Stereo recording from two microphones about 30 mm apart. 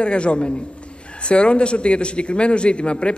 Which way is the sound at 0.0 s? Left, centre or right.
Left.